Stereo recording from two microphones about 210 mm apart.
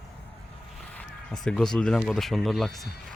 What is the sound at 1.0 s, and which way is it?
Speech, 5° left (ahead or behind).